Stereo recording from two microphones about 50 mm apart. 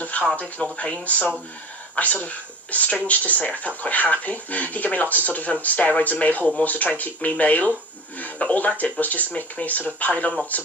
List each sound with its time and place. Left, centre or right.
0.7 s speech: left